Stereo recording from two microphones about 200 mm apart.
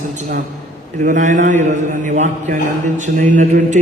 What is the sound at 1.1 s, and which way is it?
A man's voice, 40° right (ahead or behind).